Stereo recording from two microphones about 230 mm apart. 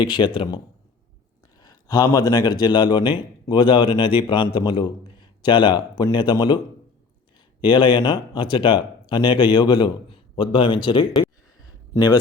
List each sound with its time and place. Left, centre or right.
0.0 s speech: centre
7.6 s speech: centre